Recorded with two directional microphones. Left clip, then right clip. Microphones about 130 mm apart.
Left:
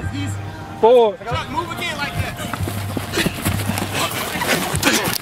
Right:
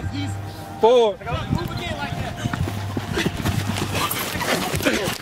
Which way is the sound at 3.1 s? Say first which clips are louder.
Left 4 dB; 30° left (ahead or behind).